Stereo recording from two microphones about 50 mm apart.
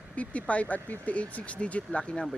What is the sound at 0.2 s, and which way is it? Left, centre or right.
Speech, left.